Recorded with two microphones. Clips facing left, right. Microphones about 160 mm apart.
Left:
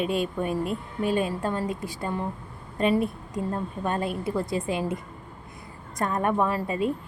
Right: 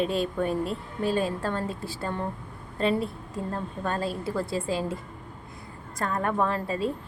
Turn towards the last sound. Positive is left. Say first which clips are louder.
# left 2 dB
turn(degrees=15)  # may be behind; listen again after turning